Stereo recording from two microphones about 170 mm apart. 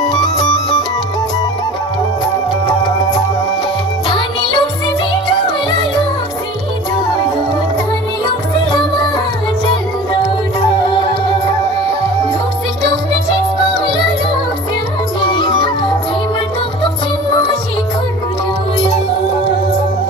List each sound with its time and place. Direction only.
4.1 s music: 25° left (ahead or behind)
15.2 s music: 25° left (ahead or behind)